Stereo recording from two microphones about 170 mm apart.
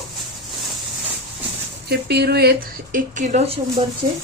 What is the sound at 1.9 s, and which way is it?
Speech, 70° right (ahead or behind).